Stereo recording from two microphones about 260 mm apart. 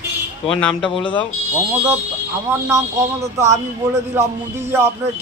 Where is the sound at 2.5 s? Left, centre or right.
Centre.